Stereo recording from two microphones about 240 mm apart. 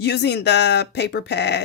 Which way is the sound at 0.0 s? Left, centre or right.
Left.